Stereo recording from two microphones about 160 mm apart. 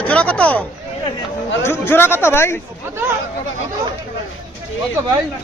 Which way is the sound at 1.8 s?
15° left (ahead or behind).